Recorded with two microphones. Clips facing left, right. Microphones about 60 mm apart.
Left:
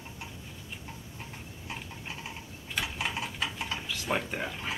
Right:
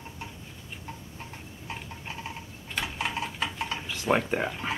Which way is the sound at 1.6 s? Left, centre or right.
Centre.